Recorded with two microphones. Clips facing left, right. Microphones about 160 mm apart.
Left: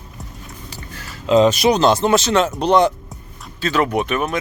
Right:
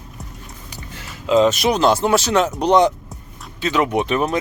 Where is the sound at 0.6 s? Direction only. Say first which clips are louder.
Even; 20° right (ahead or behind).